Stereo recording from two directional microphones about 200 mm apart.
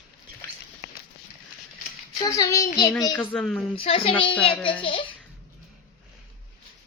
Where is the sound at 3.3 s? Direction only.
5° left (ahead or behind).